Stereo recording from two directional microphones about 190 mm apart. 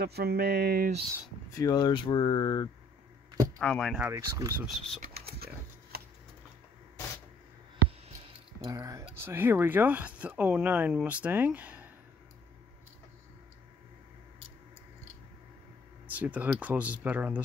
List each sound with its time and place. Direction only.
0.0 s a sound: 55° right (ahead or behind)
1.5 s speech: 20° left (ahead or behind)
3.5 s speech: 5° left (ahead or behind)
4.1 s speech: 15° right (ahead or behind)
4.6 s speech: centre (ahead or behind)
5.0 s typing: 55° right (ahead or behind)
8.6 s speech: 20° right (ahead or behind)
16.2 s speech: 10° right (ahead or behind)